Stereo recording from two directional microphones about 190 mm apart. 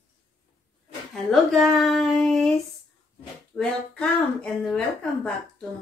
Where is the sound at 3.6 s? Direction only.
5° left (ahead or behind).